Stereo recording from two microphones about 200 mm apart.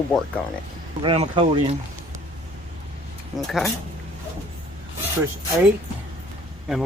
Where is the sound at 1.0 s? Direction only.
25° right (ahead or behind).